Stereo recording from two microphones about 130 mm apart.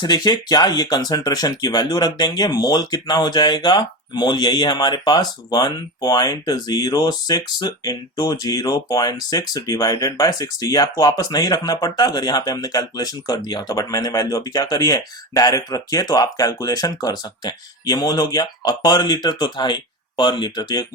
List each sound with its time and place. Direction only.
0.0 s speech: 30° left (ahead or behind)